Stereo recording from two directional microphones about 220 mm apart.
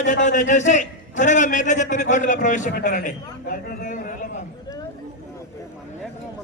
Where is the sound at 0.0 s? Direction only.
35° left (ahead or behind).